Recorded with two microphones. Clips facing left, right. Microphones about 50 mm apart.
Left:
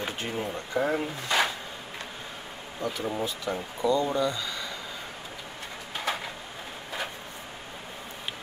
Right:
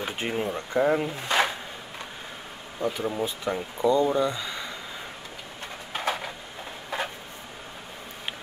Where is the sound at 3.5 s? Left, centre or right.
Centre.